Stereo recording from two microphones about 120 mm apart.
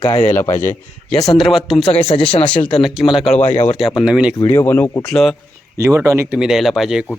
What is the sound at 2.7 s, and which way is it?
Speech, centre (ahead or behind).